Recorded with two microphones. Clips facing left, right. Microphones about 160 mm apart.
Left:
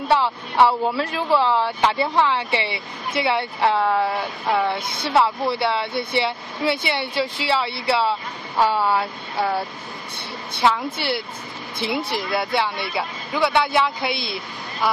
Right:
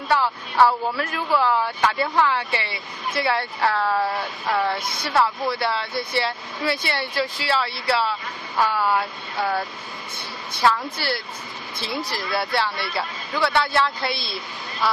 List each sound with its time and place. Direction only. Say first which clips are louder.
0.1 s speech: left 2 dB; 25° left (ahead or behind)
3.9 s speech: left 2 dB; centre (ahead or behind)
4.9 s speech: left 4 dB; 25° left (ahead or behind)
10.5 s speech: left 1 dB; 25° left (ahead or behind)